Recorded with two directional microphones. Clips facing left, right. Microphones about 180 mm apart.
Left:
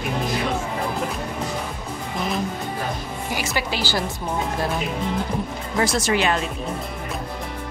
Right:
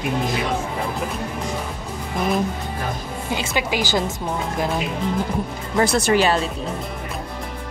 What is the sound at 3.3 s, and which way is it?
Speech, 20° right (ahead or behind).